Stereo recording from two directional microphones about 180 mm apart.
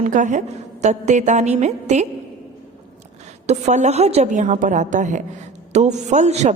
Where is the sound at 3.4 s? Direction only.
40° right (ahead or behind).